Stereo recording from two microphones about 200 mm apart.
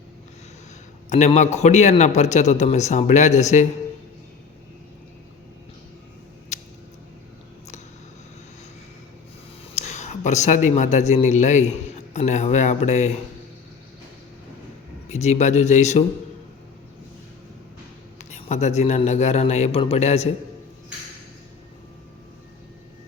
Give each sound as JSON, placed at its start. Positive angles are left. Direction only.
{"t": 1.1, "sound": "speech", "side_deg": 35}
{"t": 6.5, "sound": "a sound", "side_deg": 35}
{"t": 9.7, "sound": "speech", "side_deg": 35}
{"t": 15.1, "sound": "speech", "side_deg": 35}
{"t": 18.2, "sound": "speech", "side_deg": 35}